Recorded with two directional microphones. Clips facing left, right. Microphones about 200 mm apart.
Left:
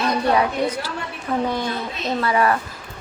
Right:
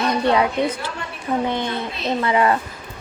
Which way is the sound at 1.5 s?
20° right (ahead or behind).